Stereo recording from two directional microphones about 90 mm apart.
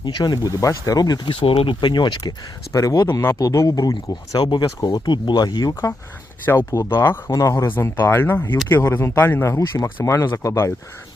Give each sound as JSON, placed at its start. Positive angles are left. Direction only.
{"t": 0.0, "sound": "speech", "side_deg": 50}
{"t": 1.2, "sound": "speech", "side_deg": 65}
{"t": 2.7, "sound": "speech", "side_deg": 40}
{"t": 3.1, "sound": "speech", "side_deg": 25}
{"t": 3.3, "sound": "speech", "side_deg": 40}
{"t": 6.7, "sound": "speech", "side_deg": 30}